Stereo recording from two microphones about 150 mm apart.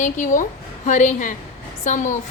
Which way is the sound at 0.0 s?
60° left (ahead or behind).